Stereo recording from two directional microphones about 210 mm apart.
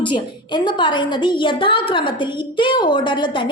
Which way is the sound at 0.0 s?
20° left (ahead or behind).